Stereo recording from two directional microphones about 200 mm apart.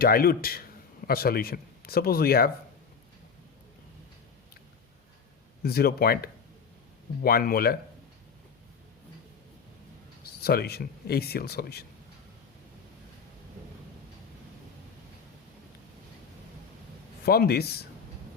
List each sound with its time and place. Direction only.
0.0 s speech: 50° left (ahead or behind)
5.6 s speech: 50° left (ahead or behind)
10.2 s speech: 50° left (ahead or behind)
17.2 s speech: 50° left (ahead or behind)